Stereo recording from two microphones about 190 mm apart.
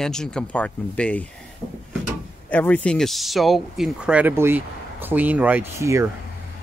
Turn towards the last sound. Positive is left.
turn(degrees=-15)  # may be behind; listen again after turning